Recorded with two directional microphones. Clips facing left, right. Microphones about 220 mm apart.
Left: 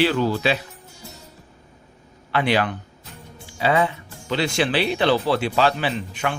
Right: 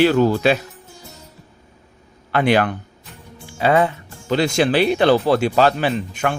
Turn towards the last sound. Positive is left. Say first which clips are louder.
# right 4 dB
turn(degrees=-45)  # may be behind; listen again after turning